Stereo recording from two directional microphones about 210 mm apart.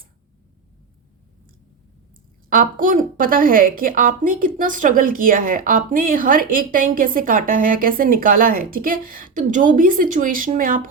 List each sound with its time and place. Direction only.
2.5 s a woman's voice: 40° right (ahead or behind)